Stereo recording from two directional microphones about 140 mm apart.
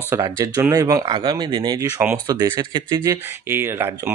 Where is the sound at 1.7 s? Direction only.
20° right (ahead or behind).